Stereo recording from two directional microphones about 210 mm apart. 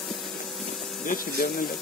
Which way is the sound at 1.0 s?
45° left (ahead or behind).